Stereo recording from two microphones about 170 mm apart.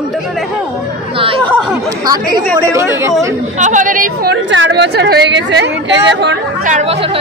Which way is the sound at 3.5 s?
45° right (ahead or behind).